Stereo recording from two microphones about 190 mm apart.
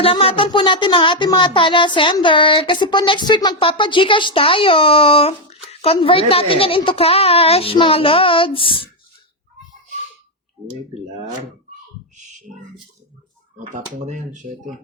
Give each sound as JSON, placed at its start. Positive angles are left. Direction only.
{"t": 0.0, "sound": "speech", "side_deg": 30}
{"t": 12.1, "sound": "a sound", "side_deg": -40}
{"t": 13.7, "sound": "speech", "side_deg": -40}